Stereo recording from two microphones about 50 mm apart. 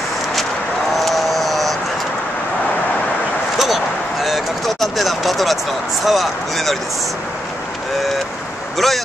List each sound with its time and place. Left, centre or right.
0.9 s vehicle: centre
3.5 s a sound: centre
6.0 s speech: centre
8.7 s speech: centre